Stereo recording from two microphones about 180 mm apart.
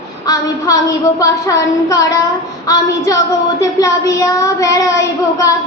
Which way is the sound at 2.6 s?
20° left (ahead or behind).